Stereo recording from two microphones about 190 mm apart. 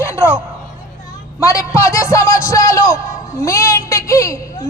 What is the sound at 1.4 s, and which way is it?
A man's voice, 15° left (ahead or behind).